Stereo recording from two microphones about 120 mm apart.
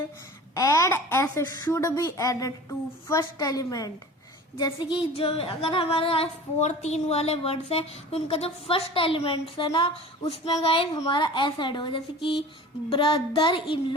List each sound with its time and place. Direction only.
0.5 s a woman's voice: 25° left (ahead or behind)
4.5 s speech: 40° left (ahead or behind)